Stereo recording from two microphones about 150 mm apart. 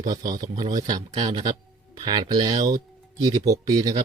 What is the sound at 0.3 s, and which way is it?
Speech, 25° right (ahead or behind).